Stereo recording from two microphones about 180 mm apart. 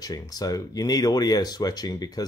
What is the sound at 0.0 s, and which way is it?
Speech, 20° left (ahead or behind).